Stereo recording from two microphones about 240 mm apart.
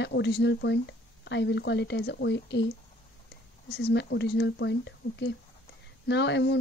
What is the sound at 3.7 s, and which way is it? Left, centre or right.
Speech, left.